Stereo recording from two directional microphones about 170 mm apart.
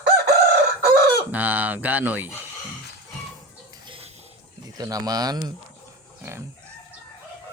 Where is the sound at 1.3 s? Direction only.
10° right (ahead or behind).